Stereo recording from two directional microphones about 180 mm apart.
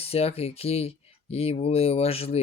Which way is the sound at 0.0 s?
35° left (ahead or behind).